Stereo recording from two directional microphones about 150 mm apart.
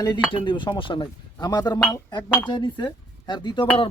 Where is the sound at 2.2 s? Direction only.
10° left (ahead or behind).